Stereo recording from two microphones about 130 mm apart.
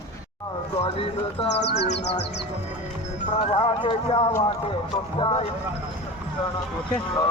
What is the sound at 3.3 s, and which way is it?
Speech, 45° left (ahead or behind).